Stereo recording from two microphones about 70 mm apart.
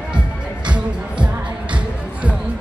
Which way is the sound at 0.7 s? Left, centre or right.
Centre.